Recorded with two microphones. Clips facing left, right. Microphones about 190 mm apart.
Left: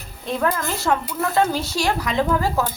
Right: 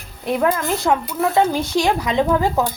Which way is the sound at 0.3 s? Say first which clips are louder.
Right 4 dB; 15° right (ahead or behind).